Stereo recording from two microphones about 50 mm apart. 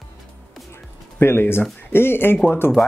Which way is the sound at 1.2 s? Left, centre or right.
Left.